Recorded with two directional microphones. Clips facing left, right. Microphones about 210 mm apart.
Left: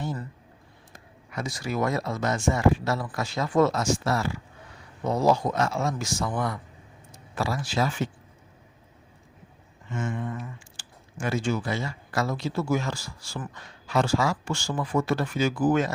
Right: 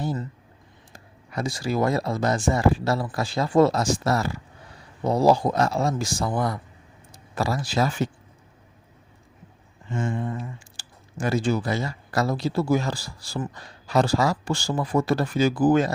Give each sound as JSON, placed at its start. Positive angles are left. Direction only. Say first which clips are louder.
{"t": 0.9, "sound": "speech", "louder": "right 4 dB", "side_deg": -35}
{"t": 9.9, "sound": "speech", "louder": "right 3 dB", "side_deg": -30}